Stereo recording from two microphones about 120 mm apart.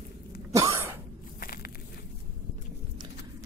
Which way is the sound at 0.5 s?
25° right (ahead or behind).